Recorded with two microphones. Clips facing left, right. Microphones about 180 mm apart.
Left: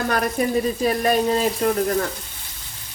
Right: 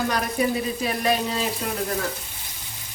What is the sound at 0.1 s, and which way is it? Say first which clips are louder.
Frying: left 3 dB; 45° left (ahead or behind).